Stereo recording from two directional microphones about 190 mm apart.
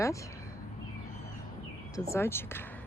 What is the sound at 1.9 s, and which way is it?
Speech, 15° left (ahead or behind).